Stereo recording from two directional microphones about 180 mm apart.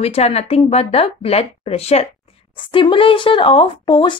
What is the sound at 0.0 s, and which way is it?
Speech, 35° left (ahead or behind).